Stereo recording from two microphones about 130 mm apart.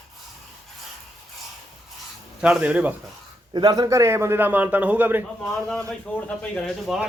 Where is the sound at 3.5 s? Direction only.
35° right (ahead or behind); by 5.2 s 15° right (ahead or behind).